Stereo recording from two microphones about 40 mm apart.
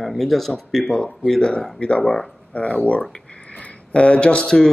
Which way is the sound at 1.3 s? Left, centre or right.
Centre.